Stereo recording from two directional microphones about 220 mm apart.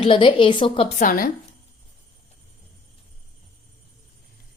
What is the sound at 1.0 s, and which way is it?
Speech, 40° left (ahead or behind).